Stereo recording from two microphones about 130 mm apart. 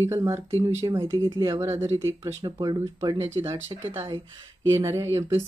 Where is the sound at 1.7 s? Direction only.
25° right (ahead or behind).